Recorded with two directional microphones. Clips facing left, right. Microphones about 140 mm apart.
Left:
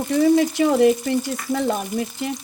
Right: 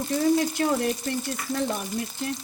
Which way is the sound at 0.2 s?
90° left.